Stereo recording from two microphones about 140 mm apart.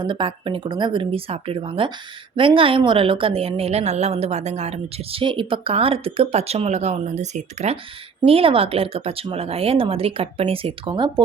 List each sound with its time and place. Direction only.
0.0 s a woman's voice: 35° right (ahead or behind); by 7.8 s 55° right (ahead or behind)
8.2 s a woman's voice: 40° right (ahead or behind)